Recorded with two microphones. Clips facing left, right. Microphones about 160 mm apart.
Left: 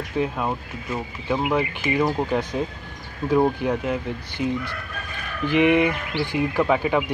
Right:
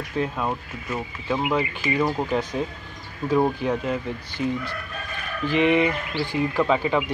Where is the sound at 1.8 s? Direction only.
20° left (ahead or behind).